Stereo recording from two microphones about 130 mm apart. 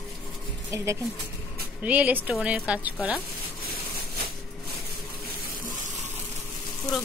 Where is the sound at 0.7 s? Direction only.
25° right (ahead or behind).